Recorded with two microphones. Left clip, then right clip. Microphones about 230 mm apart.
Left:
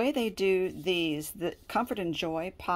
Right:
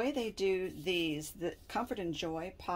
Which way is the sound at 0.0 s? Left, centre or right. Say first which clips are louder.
Left 6 dB; left.